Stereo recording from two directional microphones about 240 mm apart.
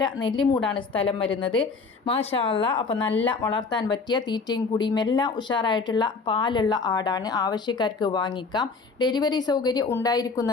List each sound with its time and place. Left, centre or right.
0.3 s speech: centre